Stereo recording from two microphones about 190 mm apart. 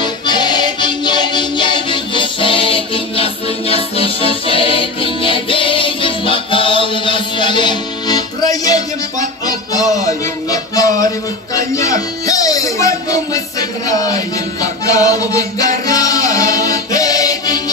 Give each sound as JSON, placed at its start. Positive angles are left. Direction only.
{"t": 0.0, "sound": "music", "side_deg": 20}